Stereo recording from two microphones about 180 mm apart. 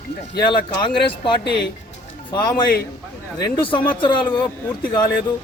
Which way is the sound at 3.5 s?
25° left (ahead or behind).